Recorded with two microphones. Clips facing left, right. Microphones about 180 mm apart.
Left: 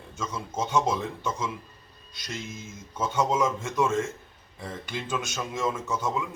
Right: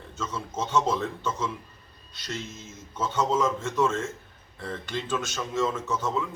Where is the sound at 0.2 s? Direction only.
10° left (ahead or behind).